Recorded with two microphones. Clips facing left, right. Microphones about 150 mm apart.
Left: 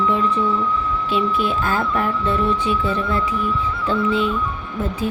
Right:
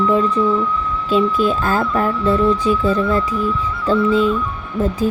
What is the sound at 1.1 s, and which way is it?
Speech, 40° right (ahead or behind).